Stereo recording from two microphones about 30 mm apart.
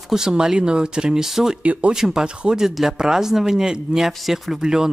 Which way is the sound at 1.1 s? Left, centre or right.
Centre.